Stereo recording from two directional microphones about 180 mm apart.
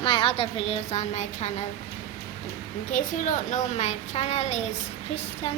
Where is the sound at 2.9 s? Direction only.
45° left (ahead or behind).